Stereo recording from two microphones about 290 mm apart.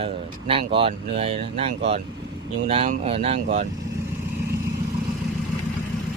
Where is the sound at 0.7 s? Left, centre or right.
Centre.